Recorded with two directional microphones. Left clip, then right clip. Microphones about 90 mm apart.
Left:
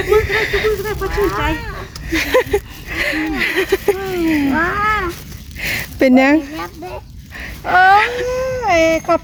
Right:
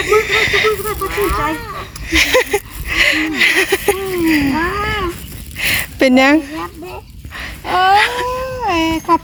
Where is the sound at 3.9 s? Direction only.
15° left (ahead or behind).